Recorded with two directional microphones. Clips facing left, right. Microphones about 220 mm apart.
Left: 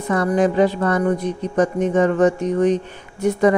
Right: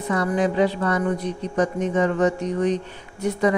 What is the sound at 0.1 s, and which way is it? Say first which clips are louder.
Speech: left 4 dB; 50° left (ahead or behind).